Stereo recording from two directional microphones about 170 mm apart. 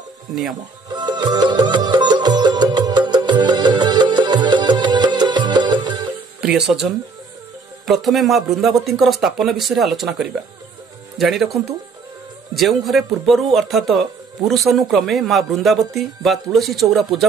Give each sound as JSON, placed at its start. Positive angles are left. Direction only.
{"t": 0.3, "sound": "speech", "side_deg": 0}
{"t": 0.8, "sound": "music", "side_deg": -25}
{"t": 6.4, "sound": "speech", "side_deg": -5}
{"t": 12.5, "sound": "speech", "side_deg": 0}